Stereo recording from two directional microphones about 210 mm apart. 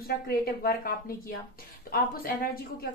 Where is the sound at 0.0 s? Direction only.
45° left (ahead or behind).